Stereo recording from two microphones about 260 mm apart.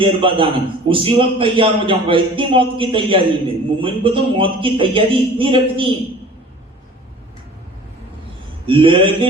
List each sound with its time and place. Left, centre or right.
0.0 s a man's voice: centre
8.6 s a man's voice: centre